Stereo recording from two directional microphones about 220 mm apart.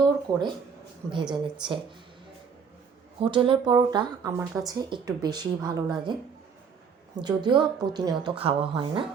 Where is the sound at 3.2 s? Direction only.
25° right (ahead or behind).